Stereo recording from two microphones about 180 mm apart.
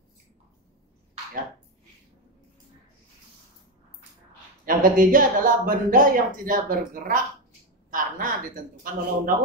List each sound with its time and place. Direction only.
4.6 s speech: 50° right (ahead or behind)